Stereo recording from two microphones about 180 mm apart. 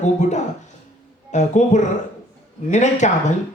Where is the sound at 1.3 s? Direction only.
40° left (ahead or behind).